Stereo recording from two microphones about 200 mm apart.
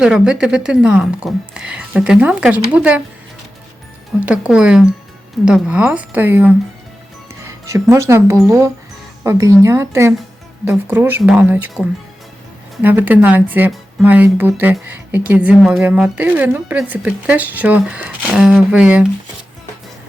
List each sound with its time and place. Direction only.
0.0 s speech: 5° right (ahead or behind)
4.3 s speech: 5° right (ahead or behind)